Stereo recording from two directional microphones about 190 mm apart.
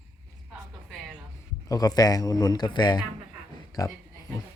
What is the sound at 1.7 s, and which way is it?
Speech, 20° left (ahead or behind).